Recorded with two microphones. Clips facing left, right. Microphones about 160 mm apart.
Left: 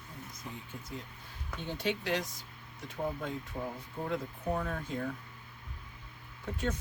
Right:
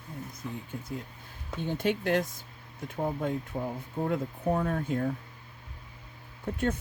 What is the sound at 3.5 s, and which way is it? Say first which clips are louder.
Speech: right 6 dB; 50° right (ahead or behind).